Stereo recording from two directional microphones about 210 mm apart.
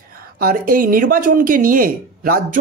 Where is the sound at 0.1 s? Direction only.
45° right (ahead or behind).